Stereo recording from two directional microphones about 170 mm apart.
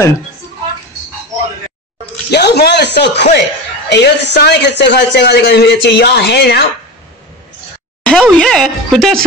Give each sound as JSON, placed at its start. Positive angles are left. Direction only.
{"t": 2.3, "sound": "a man's voice", "side_deg": 75}
{"t": 8.0, "sound": "speech", "side_deg": 5}